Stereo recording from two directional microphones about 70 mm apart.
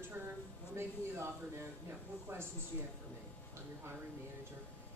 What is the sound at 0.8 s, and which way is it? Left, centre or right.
Speech, right.